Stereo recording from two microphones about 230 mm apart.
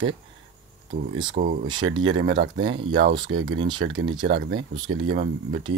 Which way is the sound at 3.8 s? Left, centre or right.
Right.